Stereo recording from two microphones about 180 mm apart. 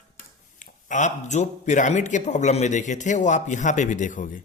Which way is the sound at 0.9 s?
40° left (ahead or behind).